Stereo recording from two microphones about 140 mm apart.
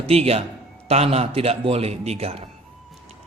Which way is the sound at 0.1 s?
45° right (ahead or behind).